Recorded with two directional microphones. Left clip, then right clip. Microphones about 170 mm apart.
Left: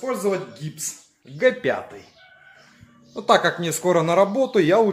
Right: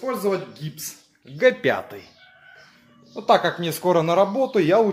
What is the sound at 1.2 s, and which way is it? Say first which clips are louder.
Speech: right 1 dB; 15° right (ahead or behind).